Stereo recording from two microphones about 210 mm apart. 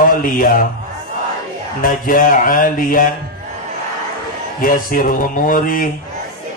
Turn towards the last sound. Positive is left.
turn(degrees=40)  # may be behind; listen again after turning